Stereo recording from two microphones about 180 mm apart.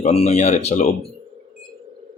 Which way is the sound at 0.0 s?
35° left (ahead or behind).